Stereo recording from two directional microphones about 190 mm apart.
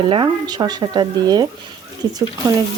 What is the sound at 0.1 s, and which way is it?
Speech, 25° right (ahead or behind).